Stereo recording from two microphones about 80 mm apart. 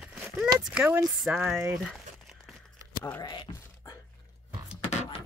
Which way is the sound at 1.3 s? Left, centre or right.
Centre.